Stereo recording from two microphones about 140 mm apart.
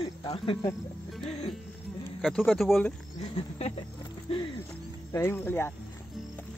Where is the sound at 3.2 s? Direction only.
45° left (ahead or behind).